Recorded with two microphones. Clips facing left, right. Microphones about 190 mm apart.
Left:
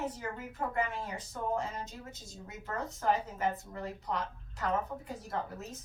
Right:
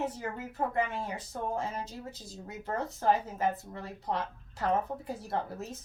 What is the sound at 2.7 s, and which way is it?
A woman's voice, 35° right (ahead or behind).